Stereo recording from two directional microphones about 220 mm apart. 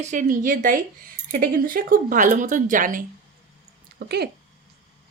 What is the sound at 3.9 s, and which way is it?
Speech, 45° right (ahead or behind).